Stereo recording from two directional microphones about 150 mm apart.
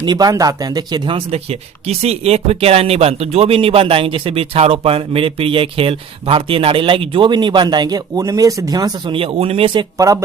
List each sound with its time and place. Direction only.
0.0 s speech: 25° right (ahead or behind)
10.0 s speech: 20° right (ahead or behind)